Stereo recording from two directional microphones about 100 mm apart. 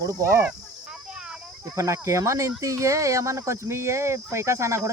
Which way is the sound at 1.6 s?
30° right (ahead or behind).